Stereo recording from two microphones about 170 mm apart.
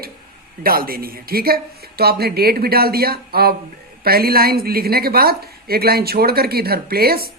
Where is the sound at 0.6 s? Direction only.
60° right (ahead or behind).